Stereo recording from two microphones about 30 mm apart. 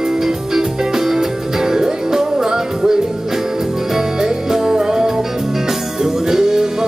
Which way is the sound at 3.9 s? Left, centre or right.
Centre.